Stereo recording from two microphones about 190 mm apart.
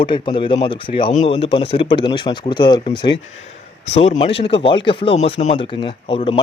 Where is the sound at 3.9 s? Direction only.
35° left (ahead or behind).